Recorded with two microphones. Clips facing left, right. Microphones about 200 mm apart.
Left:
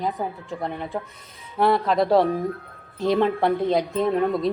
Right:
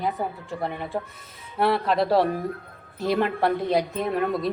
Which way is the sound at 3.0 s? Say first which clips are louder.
Left 3 dB; 20° left (ahead or behind).